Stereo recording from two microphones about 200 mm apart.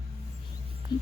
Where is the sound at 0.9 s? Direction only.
20° left (ahead or behind).